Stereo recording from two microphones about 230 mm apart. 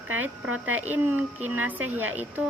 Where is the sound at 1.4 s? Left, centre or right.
Centre.